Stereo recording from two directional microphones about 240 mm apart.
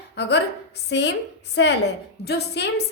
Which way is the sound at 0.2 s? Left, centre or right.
Left.